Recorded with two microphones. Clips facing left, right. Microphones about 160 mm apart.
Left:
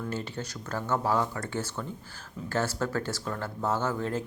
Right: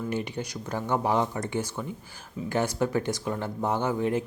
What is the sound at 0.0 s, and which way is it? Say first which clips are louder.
Speech: right 4 dB; 15° right (ahead or behind).